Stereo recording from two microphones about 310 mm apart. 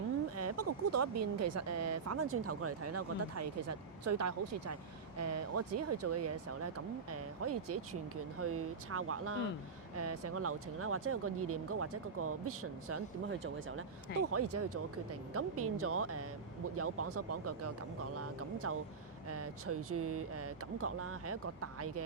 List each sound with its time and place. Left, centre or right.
0.3 s speech: right
14.1 s speech: left
15.3 s speech: right